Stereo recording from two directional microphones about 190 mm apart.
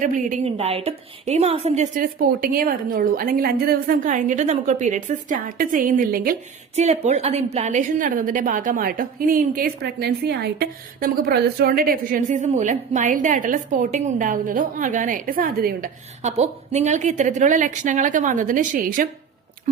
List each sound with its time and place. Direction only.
0.0 s a woman's voice: 45° right (ahead or behind)
6.7 s a woman's voice: 35° right (ahead or behind)
16.3 s a woman's voice: 35° right (ahead or behind)